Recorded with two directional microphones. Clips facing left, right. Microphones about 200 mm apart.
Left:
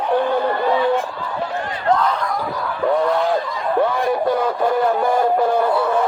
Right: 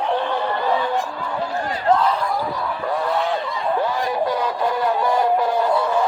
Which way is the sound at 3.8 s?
55° left (ahead or behind).